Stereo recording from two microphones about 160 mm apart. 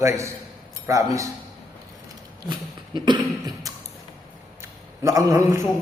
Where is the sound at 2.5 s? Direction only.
30° right (ahead or behind).